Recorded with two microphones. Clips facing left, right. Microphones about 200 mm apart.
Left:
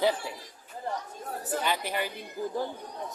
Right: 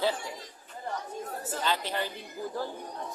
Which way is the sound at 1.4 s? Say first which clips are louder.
Left 2 dB; 15° left (ahead or behind).